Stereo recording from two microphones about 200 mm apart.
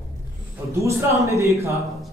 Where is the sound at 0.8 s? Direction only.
15° right (ahead or behind).